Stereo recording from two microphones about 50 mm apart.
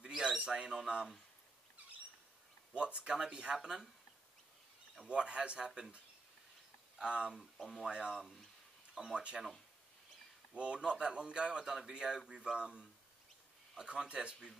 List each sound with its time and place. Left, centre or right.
0.0 s bird: centre
0.5 s speech: centre
2.7 s a man's voice: right; by 3.9 s centre
5.0 s a man's voice: centre
7.0 s a man's voice: centre
7.3 s speech: centre
7.9 s a man's voice: centre
10.5 s a man's voice: right
11.6 s a man's voice: centre